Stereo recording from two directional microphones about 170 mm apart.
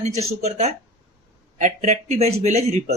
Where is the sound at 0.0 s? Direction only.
40° right (ahead or behind).